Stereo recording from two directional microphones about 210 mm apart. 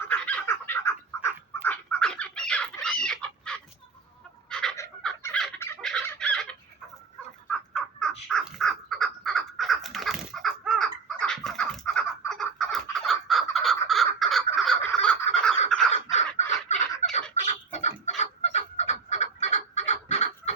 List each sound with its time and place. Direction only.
0.1 s fowl: 10° left (ahead or behind)
1.6 s bird: 5° left (ahead or behind)
4.4 s fowl: 5° left (ahead or behind)
7.7 s crow: 5° left (ahead or behind)
12.3 s fowl: 5° left (ahead or behind)
15.7 s crow: centre (ahead or behind)
16.7 s fowl: 35° left (ahead or behind)
17.4 s a sound: 30° left (ahead or behind)
18.2 s fowl: 30° left (ahead or behind)